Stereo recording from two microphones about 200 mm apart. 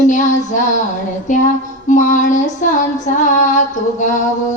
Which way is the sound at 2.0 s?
40° left (ahead or behind).